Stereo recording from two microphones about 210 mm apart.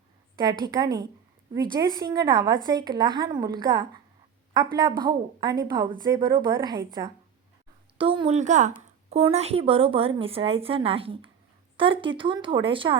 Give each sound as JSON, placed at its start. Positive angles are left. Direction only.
{"t": 0.3, "sound": "speech", "side_deg": -20}